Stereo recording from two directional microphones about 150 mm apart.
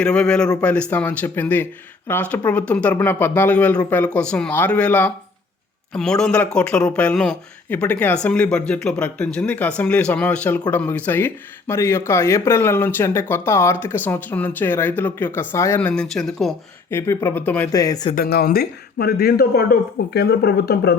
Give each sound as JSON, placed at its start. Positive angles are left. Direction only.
{"t": 0.0, "sound": "speech", "side_deg": 5}
{"t": 16.9, "sound": "speech", "side_deg": 15}
{"t": 17.7, "sound": "speech", "side_deg": 25}
{"t": 18.1, "sound": "speech", "side_deg": 80}